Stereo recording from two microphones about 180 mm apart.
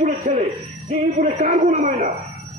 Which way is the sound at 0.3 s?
45° right (ahead or behind).